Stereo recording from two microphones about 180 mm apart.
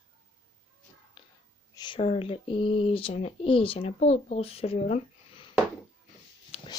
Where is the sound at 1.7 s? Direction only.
25° left (ahead or behind).